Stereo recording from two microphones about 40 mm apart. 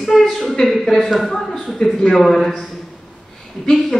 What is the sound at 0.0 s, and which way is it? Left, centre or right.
A woman's voice, centre.